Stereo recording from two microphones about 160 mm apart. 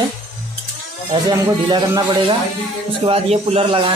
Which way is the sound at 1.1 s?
25° right (ahead or behind).